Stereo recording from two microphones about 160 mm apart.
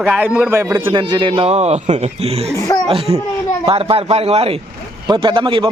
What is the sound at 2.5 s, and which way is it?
Speech, 20° left (ahead or behind).